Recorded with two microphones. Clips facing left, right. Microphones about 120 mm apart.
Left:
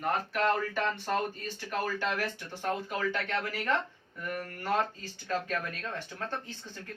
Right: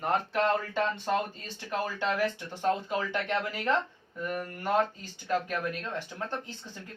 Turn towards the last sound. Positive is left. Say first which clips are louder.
# right 1 dB
turn(degrees=-15)  # may be behind; listen again after turning